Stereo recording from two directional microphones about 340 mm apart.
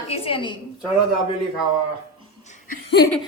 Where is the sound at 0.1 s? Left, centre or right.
Centre.